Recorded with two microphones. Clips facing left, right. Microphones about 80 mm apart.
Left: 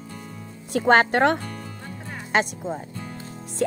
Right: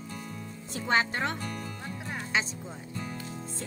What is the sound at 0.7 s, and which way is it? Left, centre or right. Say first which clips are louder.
Speech: left 10 dB; left.